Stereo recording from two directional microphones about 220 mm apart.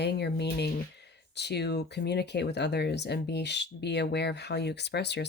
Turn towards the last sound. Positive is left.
turn(degrees=50)  # may be behind; listen again after turning